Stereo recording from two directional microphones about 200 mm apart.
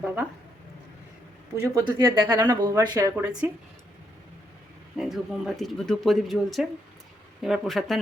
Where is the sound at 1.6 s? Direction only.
15° right (ahead or behind).